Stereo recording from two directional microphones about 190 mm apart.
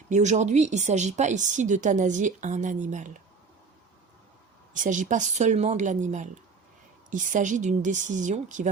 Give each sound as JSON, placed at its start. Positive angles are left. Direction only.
{"t": 0.1, "sound": "speech", "side_deg": -40}
{"t": 4.7, "sound": "speech", "side_deg": -40}